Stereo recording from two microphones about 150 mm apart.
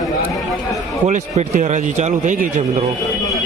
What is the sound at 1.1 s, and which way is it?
A man's voice, 50° right (ahead or behind).